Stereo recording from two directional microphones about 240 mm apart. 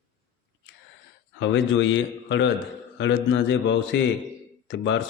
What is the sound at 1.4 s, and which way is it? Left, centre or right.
Speech, left.